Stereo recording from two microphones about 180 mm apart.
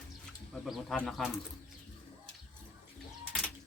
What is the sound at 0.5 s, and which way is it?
Speech, centre (ahead or behind).